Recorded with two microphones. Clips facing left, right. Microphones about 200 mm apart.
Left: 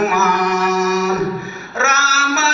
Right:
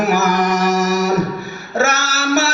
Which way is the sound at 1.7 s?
35° right (ahead or behind).